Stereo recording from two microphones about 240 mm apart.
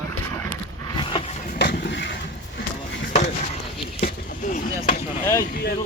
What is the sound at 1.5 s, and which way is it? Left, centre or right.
Vehicle, left.